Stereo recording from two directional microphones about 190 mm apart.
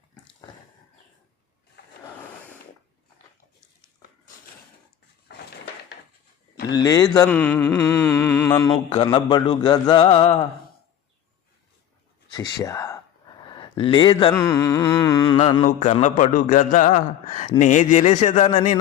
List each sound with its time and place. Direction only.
5.3 s a sound: 55° left (ahead or behind)
6.7 s mantra: 20° left (ahead or behind)
12.4 s speech: 15° left (ahead or behind)
13.5 s mantra: 25° left (ahead or behind)
15.6 s a man's voice: 40° left (ahead or behind)